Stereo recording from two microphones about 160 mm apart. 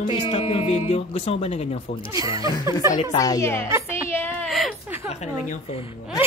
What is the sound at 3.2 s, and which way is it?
Speech, 20° left (ahead or behind).